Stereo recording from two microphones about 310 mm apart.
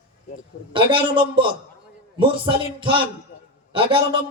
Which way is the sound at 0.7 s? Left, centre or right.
Centre.